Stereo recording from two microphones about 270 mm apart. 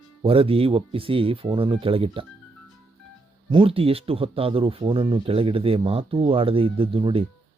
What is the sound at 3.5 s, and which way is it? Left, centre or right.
Speech, centre.